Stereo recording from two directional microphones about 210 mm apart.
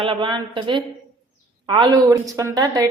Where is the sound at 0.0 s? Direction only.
25° right (ahead or behind).